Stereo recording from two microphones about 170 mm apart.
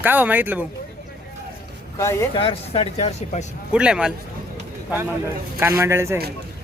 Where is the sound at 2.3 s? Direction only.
30° left (ahead or behind).